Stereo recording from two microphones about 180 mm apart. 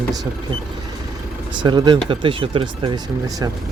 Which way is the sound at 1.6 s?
25° right (ahead or behind).